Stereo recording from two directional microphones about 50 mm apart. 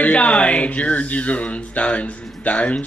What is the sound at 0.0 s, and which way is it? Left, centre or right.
Speech, left.